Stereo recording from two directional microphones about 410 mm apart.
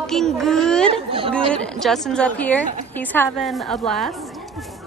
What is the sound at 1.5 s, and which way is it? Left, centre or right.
A woman's voice, centre.